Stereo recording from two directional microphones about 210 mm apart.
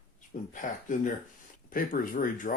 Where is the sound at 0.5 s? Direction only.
40° left (ahead or behind).